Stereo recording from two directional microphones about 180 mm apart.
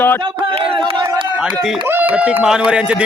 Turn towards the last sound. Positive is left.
turn(degrees=-5)  # may be behind; listen again after turning